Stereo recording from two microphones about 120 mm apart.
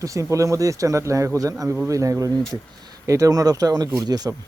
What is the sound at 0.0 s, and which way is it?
A man's voice, 25° right (ahead or behind).